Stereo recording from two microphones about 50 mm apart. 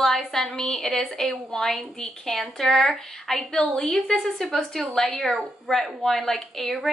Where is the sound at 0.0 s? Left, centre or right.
Centre.